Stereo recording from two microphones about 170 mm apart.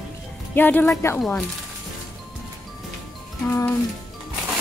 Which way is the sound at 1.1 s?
5° left (ahead or behind).